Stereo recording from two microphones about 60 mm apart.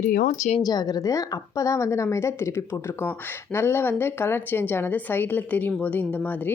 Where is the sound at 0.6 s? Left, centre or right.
Left.